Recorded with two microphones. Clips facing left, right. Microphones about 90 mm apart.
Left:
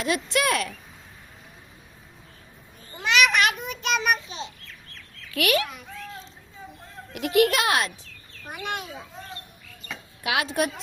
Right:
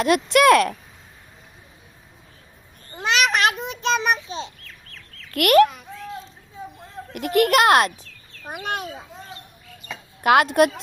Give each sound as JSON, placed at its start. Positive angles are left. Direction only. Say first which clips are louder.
{"t": 0.0, "sound": "a woman's voice", "louder": "right 9 dB", "side_deg": -65}
{"t": 3.0, "sound": "babbling", "louder": "right 1 dB", "side_deg": -35}
{"t": 5.3, "sound": "a child's voice", "louder": "right 10 dB", "side_deg": -50}
{"t": 7.1, "sound": "a child's voice", "louder": "right 2 dB", "side_deg": -50}
{"t": 8.4, "sound": "speech", "louder": "right 4 dB", "side_deg": -40}
{"t": 10.2, "sound": "a woman's voice", "louder": "right 10 dB", "side_deg": -55}